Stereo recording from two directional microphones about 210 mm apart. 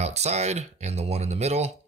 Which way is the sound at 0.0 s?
30° right (ahead or behind).